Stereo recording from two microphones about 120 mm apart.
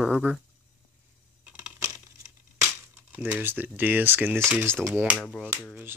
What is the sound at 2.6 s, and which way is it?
Speech, 20° right (ahead or behind).